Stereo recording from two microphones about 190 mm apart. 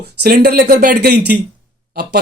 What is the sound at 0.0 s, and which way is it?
Speech, 55° right (ahead or behind).